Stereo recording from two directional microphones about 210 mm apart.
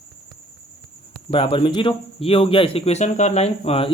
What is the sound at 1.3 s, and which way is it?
Speech, 25° left (ahead or behind).